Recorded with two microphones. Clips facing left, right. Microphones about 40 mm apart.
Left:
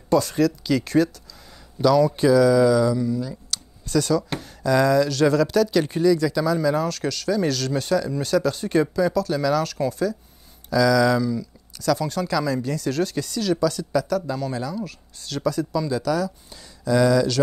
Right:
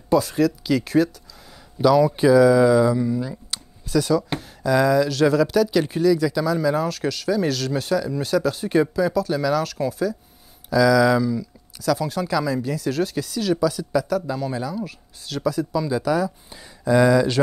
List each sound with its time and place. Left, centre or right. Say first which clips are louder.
0.1 s speech: right 1 dB; centre
3.8 s speech: right 1 dB; centre